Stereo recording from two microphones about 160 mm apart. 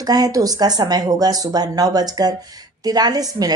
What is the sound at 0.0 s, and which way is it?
Speech, 25° right (ahead or behind).